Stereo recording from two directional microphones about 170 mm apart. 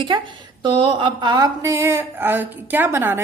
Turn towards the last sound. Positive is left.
turn(degrees=-15)  # may be behind; listen again after turning